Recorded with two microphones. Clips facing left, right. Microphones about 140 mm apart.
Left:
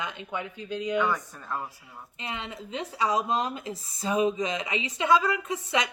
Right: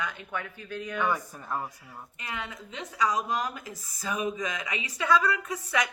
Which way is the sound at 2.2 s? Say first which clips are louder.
Left 2 dB; 25° left (ahead or behind).